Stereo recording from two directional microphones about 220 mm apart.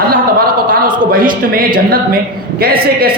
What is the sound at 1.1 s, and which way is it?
A man's voice, 40° right (ahead or behind).